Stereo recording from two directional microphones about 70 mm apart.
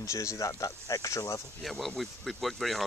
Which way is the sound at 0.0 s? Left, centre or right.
Left.